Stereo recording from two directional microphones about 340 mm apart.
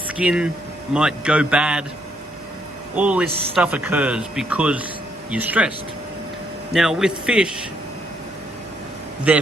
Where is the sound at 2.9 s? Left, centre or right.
Centre.